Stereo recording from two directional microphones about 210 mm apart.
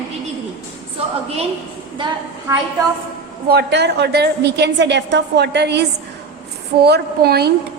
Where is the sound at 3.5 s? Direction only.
50° right (ahead or behind).